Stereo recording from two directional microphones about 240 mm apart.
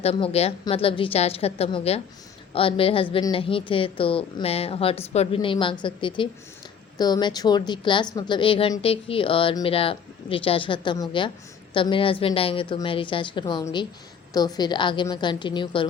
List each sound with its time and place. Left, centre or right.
0.0 s a woman's voice: left